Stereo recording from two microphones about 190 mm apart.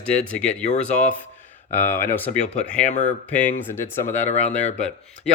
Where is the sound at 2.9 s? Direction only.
40° left (ahead or behind).